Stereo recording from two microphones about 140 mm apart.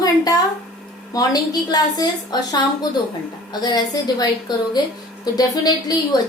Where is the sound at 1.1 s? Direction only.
30° left (ahead or behind).